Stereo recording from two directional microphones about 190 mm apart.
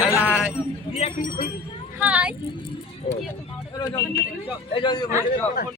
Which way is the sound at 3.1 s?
35° left (ahead or behind).